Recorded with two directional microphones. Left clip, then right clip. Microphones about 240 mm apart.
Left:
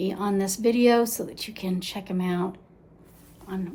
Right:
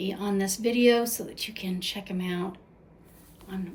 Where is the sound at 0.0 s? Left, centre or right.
Centre.